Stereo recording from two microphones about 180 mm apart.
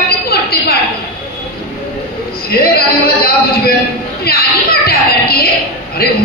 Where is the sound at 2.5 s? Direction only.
60° left (ahead or behind).